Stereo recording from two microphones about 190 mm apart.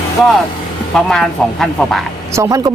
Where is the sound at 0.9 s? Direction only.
Centre (ahead or behind).